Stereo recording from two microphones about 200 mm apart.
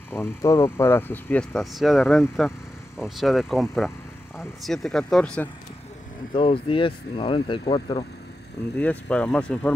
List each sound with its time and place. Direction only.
0.1 s speech: 15° left (ahead or behind)
6.3 s speech: 25° left (ahead or behind)
8.7 s speech: 5° left (ahead or behind)